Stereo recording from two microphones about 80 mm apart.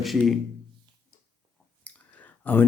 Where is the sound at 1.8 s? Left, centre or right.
Left.